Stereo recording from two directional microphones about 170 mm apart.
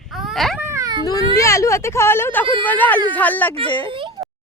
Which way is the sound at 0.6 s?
15° right (ahead or behind).